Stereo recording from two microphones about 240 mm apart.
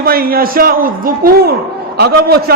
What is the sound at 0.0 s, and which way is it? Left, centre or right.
A man's voice, right.